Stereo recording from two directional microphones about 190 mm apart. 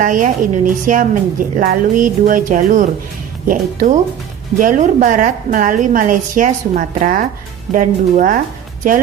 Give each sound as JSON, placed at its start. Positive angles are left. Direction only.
{"t": 0.0, "sound": "speech", "side_deg": -45}